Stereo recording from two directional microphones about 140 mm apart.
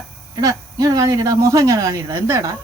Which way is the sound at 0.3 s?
25° right (ahead or behind).